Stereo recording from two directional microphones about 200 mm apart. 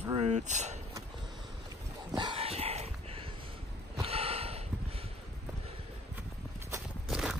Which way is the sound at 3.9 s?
30° right (ahead or behind).